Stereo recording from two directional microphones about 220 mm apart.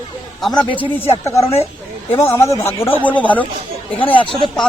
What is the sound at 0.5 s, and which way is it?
Speech, 20° left (ahead or behind).